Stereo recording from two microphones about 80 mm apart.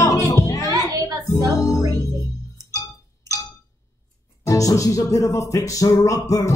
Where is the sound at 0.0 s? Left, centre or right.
Left.